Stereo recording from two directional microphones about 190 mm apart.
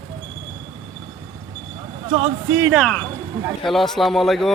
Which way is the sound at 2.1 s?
30° right (ahead or behind).